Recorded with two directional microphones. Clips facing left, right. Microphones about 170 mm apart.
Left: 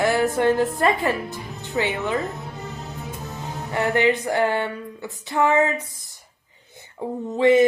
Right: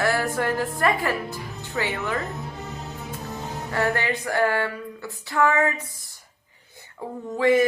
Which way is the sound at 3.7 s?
20° left (ahead or behind).